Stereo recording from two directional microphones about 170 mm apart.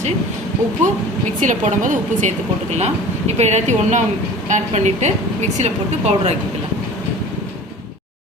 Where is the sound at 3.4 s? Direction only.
40° right (ahead or behind).